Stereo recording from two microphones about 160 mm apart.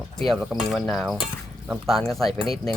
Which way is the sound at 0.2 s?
Centre (ahead or behind).